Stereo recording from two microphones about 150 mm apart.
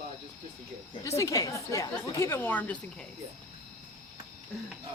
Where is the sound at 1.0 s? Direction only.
20° left (ahead or behind).